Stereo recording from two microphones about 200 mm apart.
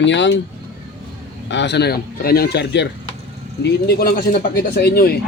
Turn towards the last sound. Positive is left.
turn(degrees=50)  # may be behind; listen again after turning